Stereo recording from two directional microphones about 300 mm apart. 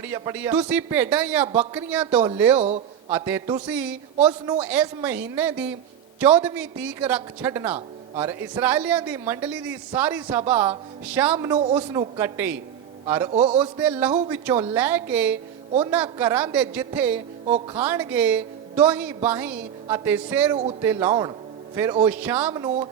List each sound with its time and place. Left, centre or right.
0.0 s a man's voice: centre
2.6 s a man's voice: right
3.1 s speech: centre
4.3 s speech: centre
4.6 s a man's voice: centre
13.3 s a man's voice: centre
13.7 s speech: centre
14.1 s a man's voice: centre
14.6 s a man's voice: centre